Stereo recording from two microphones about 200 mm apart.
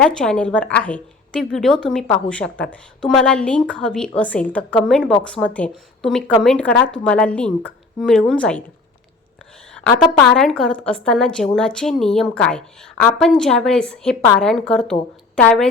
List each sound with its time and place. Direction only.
0.0 s a woman's voice: 5° left (ahead or behind)
9.7 s a woman's voice: 5° left (ahead or behind)